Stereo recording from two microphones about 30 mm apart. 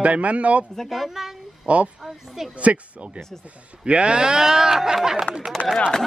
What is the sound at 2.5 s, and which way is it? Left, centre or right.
Speech, right.